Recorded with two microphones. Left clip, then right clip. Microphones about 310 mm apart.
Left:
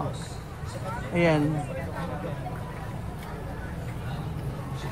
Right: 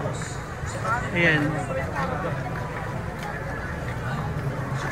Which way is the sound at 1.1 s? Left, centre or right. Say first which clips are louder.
Right 1 dB; centre.